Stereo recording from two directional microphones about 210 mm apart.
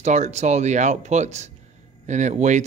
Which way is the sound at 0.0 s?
35° right (ahead or behind).